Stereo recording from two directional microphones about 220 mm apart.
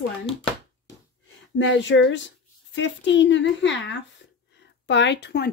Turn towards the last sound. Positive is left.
turn(degrees=50)  # may be behind; listen again after turning